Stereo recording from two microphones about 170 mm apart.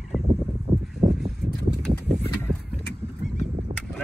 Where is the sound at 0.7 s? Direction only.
35° right (ahead or behind).